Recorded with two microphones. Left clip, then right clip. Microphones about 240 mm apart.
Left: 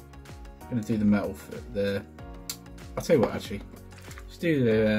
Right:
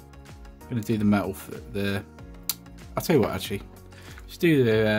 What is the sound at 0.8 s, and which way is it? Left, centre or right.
Speech, right.